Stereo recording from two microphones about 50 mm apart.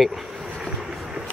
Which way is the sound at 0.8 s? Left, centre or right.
Centre.